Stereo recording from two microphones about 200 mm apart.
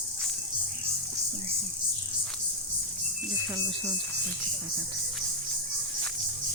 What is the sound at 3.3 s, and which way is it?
Speech, 20° right (ahead or behind).